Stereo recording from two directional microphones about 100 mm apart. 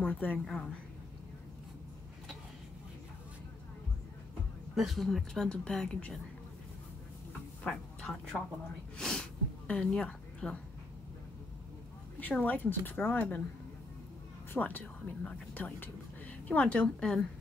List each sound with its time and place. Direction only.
0.0 s speech: 15° left (ahead or behind)
4.7 s speech: centre (ahead or behind)
7.6 s speech: 10° left (ahead or behind)
8.9 s sneeze: 5° left (ahead or behind)
12.2 s speech: 15° left (ahead or behind)
14.5 s speech: 20° left (ahead or behind)